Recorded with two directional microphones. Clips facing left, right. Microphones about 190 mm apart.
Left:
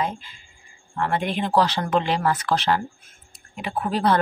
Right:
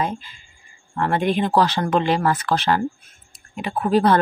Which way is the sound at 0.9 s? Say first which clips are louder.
Right 4 dB; 45° right (ahead or behind).